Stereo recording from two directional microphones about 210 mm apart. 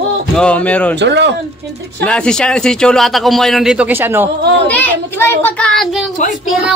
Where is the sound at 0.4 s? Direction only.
5° left (ahead or behind).